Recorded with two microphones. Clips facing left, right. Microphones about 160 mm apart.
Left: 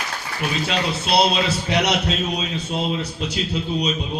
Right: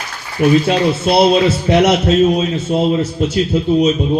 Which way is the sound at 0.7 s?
50° right (ahead or behind).